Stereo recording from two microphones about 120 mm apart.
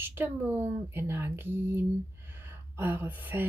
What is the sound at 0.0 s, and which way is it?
Speech, 20° right (ahead or behind).